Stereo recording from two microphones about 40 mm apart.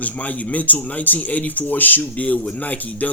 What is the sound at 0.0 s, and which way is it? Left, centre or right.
Speech, left.